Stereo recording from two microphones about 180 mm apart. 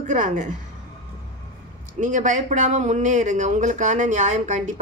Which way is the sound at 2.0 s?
45° right (ahead or behind).